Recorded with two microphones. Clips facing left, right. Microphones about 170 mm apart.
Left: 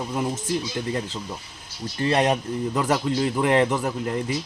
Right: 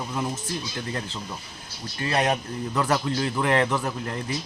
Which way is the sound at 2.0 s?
25° left (ahead or behind).